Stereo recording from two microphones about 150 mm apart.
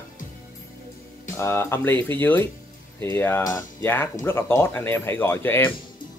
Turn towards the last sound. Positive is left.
turn(degrees=15)  # may be behind; listen again after turning